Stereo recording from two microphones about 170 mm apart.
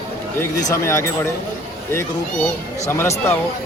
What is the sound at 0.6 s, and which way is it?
Speech, 20° left (ahead or behind).